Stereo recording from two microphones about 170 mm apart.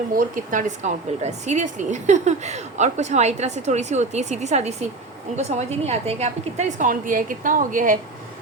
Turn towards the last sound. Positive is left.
turn(degrees=-50)  # may be behind; listen again after turning